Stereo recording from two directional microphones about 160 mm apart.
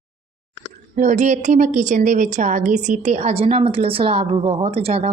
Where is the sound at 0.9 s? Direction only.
50° right (ahead or behind).